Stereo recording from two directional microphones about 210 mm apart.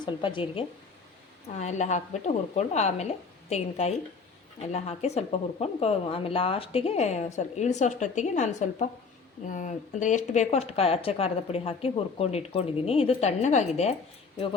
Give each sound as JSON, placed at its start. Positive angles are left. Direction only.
{"t": 0.0, "sound": "speech", "side_deg": 25}
{"t": 1.5, "sound": "speech", "side_deg": 35}